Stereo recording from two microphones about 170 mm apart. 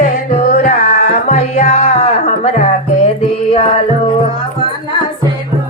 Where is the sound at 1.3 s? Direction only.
45° left (ahead or behind).